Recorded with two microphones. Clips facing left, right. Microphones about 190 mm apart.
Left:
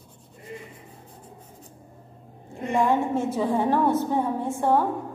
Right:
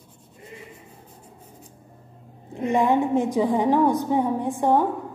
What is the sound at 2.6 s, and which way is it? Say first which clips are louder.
A woman's voice: right 2 dB; 20° right (ahead or behind).